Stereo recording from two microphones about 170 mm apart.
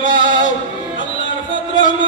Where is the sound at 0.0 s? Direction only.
90° left.